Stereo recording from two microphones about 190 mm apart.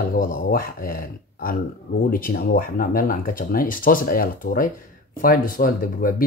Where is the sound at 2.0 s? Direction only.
50° left (ahead or behind).